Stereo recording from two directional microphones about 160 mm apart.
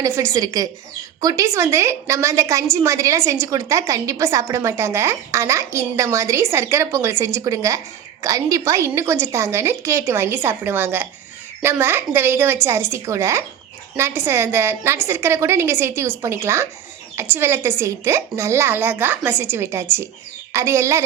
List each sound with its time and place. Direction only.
0.0 s a woman's voice: 20° right (ahead or behind)